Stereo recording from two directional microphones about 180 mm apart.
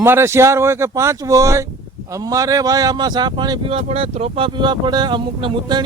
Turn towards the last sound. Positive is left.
turn(degrees=-25)  # may be behind; listen again after turning